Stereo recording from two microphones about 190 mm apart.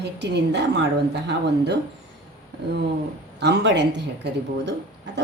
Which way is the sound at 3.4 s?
65° right (ahead or behind).